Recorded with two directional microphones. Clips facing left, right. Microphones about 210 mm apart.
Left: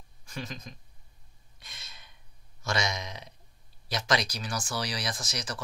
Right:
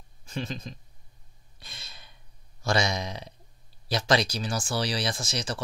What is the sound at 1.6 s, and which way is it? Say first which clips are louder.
Gasp: right 3 dB; 30° right (ahead or behind).